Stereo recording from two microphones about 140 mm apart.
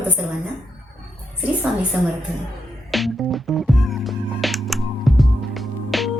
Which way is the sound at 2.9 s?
Centre (ahead or behind).